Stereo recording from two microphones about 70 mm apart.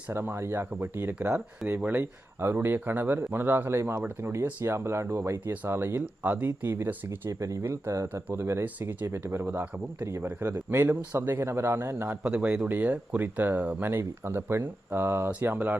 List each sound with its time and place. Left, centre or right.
0.1 s speech: right
7.3 s speech: right
12.0 s a man's voice: centre
14.0 s speech: right